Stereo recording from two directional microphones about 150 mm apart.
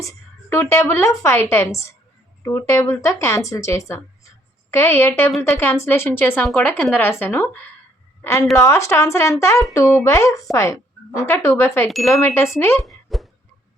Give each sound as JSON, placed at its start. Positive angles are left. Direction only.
{"t": 0.5, "sound": "a woman's voice", "side_deg": 15}
{"t": 11.9, "sound": "speech", "side_deg": 0}
{"t": 12.1, "sound": "speech", "side_deg": 20}
{"t": 12.8, "sound": "plop", "side_deg": 0}